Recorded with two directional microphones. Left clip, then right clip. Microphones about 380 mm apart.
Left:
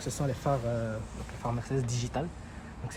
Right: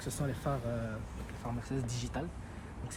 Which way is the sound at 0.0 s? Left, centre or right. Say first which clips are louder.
Left 5 dB; left.